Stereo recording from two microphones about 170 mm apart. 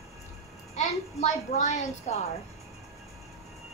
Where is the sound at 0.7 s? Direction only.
40° left (ahead or behind).